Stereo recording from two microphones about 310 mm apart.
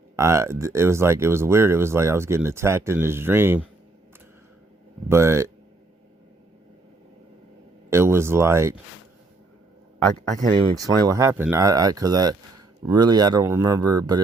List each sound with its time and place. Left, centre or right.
0.2 s speech: centre
5.0 s speech: centre
7.9 s speech: centre
10.8 s speech: centre